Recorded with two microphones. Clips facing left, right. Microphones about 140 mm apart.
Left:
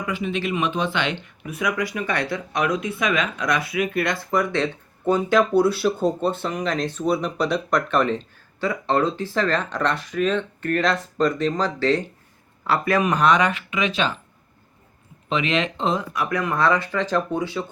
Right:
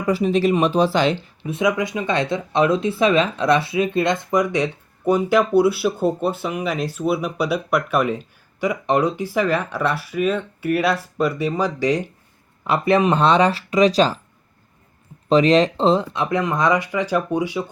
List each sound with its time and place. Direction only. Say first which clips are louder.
0.0 s speech: right 8 dB; 35° right (ahead or behind)
15.3 s speech: right 9 dB; 35° right (ahead or behind); by 17.7 s 15° right (ahead or behind)